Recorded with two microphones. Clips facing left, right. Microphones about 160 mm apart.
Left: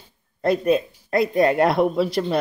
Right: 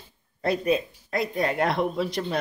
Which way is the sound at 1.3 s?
55° left (ahead or behind).